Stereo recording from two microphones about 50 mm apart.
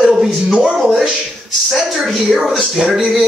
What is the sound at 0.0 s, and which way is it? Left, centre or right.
Speech, centre.